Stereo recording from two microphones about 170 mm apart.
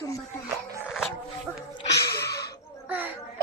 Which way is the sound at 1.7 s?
85° left.